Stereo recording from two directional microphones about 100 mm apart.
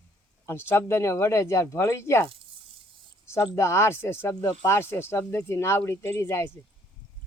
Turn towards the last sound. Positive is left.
turn(degrees=25)  # may be behind; listen again after turning